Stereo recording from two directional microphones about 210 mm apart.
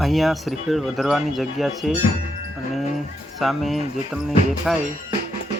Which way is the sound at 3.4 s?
Centre (ahead or behind).